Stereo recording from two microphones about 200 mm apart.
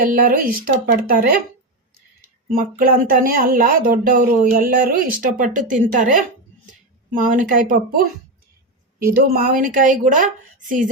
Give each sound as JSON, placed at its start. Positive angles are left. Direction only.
{"t": 0.0, "sound": "speech", "side_deg": -45}
{"t": 2.2, "sound": "speech", "side_deg": -45}
{"t": 9.0, "sound": "speech", "side_deg": -45}